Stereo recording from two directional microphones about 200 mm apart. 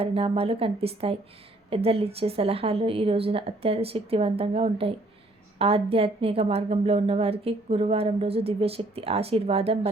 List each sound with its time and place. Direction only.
0.0 s a woman's voice: 30° right (ahead or behind)